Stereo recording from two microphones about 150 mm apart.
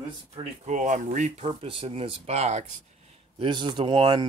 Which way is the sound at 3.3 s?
35° right (ahead or behind).